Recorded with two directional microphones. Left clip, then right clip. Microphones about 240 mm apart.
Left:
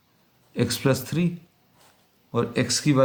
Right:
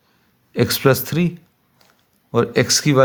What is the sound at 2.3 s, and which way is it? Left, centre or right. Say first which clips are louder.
Speech: right 8 dB; right.